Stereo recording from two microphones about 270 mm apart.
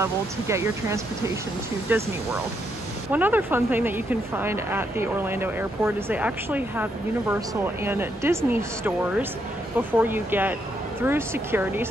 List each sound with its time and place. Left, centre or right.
0.0 s speech: centre
3.1 s speech: centre